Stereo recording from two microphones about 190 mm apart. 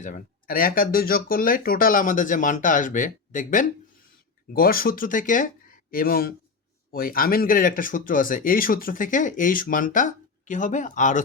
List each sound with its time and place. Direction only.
0.0 s speech: 45° left (ahead or behind)